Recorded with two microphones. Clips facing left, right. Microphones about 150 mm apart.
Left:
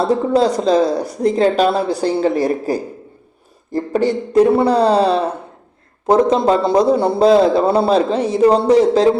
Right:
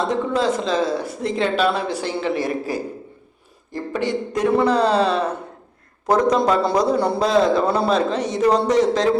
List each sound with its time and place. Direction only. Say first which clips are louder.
0.0 s a man's voice: left 6 dB; 35° left (ahead or behind)